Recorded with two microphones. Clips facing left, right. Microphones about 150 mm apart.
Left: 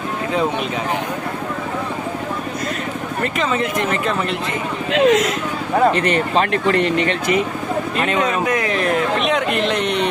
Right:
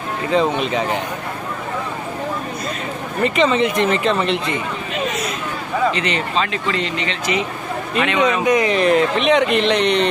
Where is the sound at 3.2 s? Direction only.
5° left (ahead or behind).